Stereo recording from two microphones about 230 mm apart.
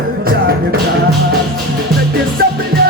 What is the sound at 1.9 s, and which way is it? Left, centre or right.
Music, right.